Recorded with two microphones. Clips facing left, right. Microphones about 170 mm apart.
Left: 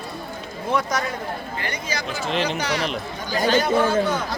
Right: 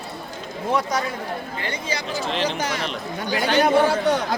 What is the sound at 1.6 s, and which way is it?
Speech, 30° right (ahead or behind).